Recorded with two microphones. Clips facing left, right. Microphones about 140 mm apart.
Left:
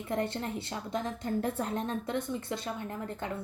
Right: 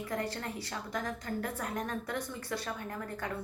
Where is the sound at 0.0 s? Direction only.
25° left (ahead or behind).